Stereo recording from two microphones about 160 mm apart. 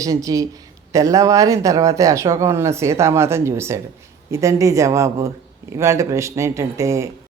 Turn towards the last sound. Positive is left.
turn(degrees=-20)  # may be behind; listen again after turning